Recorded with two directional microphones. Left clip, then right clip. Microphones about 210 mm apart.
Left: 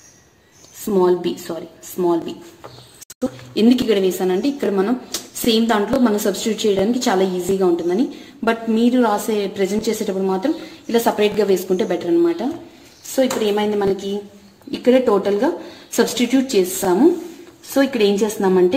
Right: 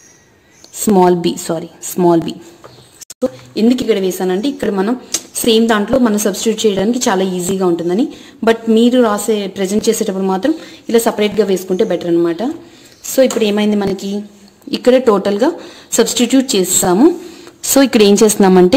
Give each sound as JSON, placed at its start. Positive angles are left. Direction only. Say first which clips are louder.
{"t": 0.9, "sound": "a woman's voice", "louder": "right 5 dB", "side_deg": -50}
{"t": 3.2, "sound": "a woman's voice", "louder": "right 4 dB", "side_deg": -15}
{"t": 13.2, "sound": "a woman's voice", "louder": "right 5 dB", "side_deg": -45}
{"t": 17.6, "sound": "a woman's voice", "louder": "right 7 dB", "side_deg": -55}